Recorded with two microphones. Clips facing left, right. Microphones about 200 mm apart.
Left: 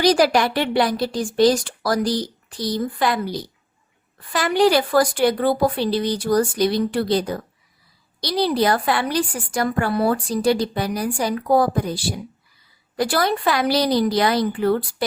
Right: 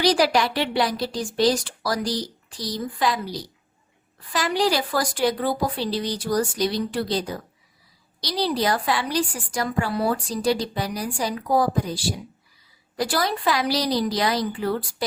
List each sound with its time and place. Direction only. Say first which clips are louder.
0.0 s a woman's voice: left 3 dB; 50° left (ahead or behind)